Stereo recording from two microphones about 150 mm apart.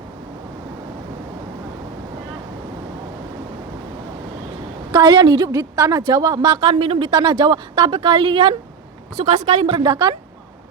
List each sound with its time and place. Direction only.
4.9 s a woman's voice: 30° right (ahead or behind)
9.1 s a woman's voice: 45° right (ahead or behind)
9.7 s a woman's voice: 30° right (ahead or behind)